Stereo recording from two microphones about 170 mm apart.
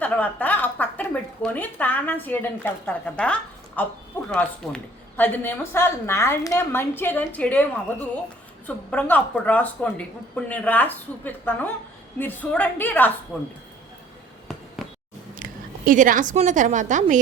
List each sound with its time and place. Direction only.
0.0 s a woman's voice: 10° left (ahead or behind)
15.9 s a woman's voice: 50° right (ahead or behind)